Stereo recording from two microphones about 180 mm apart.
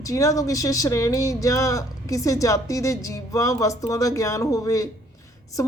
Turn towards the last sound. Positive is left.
turn(degrees=20)  # may be behind; listen again after turning